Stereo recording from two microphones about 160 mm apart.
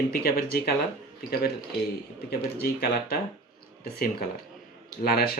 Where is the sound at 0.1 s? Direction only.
70° left (ahead or behind).